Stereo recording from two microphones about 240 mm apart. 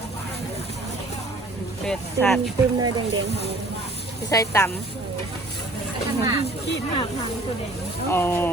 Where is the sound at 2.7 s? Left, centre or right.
Centre.